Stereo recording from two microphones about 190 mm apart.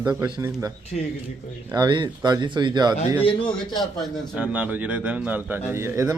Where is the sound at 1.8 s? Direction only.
25° right (ahead or behind).